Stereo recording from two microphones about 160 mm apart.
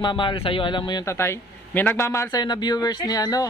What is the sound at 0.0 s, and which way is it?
Speech, 30° left (ahead or behind).